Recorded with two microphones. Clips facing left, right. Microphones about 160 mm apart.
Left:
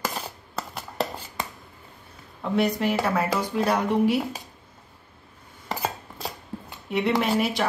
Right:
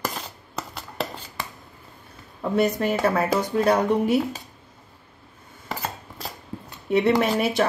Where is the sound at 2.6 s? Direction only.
50° right (ahead or behind).